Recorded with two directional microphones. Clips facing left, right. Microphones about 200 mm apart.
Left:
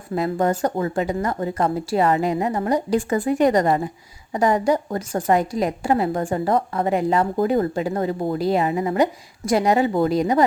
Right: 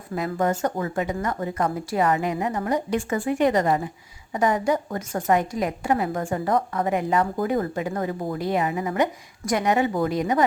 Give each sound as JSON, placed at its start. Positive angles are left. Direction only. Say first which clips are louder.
{"t": 0.1, "sound": "a woman's voice", "louder": "left 3 dB", "side_deg": 30}